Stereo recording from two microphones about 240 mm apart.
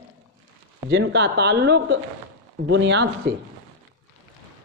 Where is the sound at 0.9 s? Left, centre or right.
Right.